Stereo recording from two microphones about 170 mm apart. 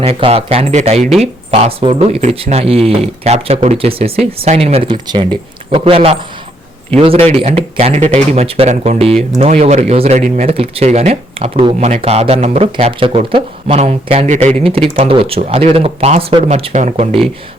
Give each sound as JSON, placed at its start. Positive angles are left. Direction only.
{"t": 0.0, "sound": "speech", "side_deg": -35}